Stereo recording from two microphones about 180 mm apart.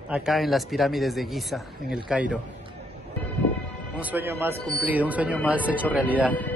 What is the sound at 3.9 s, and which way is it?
Speech, 10° right (ahead or behind).